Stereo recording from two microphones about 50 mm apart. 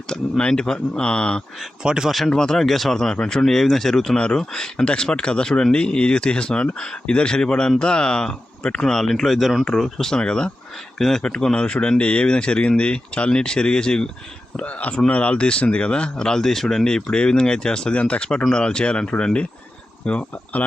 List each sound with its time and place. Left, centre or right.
0.1 s speech: centre
1.8 s speech: centre
2.0 s speech: centre
2.3 s speech: centre
14.5 s speech: left